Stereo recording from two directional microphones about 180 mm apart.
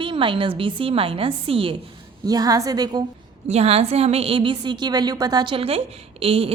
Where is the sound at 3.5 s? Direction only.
35° right (ahead or behind).